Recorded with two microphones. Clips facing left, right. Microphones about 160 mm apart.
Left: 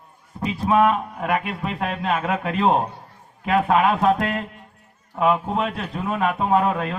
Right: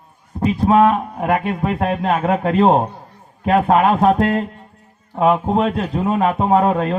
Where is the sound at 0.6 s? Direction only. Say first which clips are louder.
Right 4 dB; 25° right (ahead or behind).